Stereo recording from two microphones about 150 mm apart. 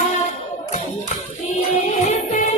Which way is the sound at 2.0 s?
55° left (ahead or behind).